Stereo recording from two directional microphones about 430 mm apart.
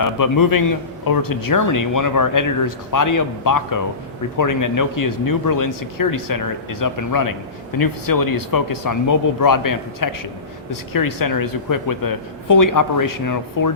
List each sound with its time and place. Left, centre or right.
0.0 s speech: left